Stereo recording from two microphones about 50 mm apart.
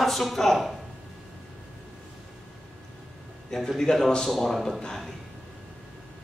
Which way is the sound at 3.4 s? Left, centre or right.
Centre.